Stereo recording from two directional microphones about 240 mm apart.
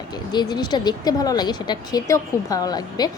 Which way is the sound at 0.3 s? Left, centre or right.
Centre.